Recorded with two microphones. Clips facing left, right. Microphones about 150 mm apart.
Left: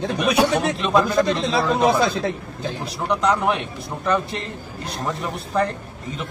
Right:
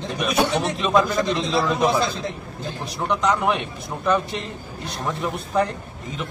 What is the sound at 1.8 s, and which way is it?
Speech, 60° left (ahead or behind).